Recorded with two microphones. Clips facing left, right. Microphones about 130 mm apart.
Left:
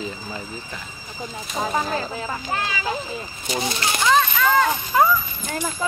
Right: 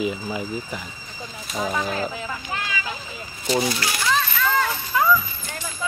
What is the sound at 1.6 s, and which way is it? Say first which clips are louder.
Speech: left 1 dB; 35° left (ahead or behind).